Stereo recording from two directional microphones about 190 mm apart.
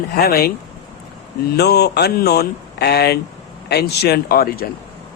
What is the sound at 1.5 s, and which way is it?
Speech, 60° left (ahead or behind).